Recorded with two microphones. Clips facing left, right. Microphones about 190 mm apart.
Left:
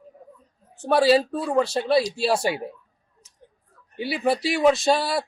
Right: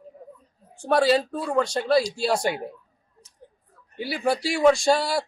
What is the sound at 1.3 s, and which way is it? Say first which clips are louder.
A man's voice: left 2 dB; 5° left (ahead or behind).